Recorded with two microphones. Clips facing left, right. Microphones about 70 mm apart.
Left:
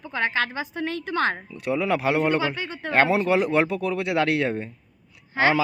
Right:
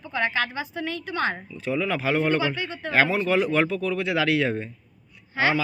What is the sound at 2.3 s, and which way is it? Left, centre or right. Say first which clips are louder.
Speech: even; left.